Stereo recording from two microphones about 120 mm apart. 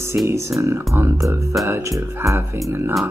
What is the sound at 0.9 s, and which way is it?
Speech, 20° right (ahead or behind).